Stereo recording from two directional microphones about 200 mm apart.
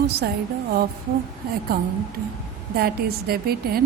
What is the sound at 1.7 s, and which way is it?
Speech, 50° right (ahead or behind).